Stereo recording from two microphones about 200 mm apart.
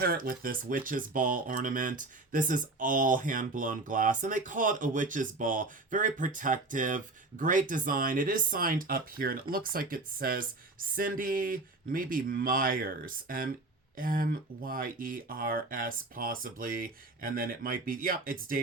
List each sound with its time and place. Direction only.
0.0 s speech: 50° right (ahead or behind)